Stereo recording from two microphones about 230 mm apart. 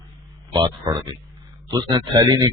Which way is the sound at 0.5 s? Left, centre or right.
Centre.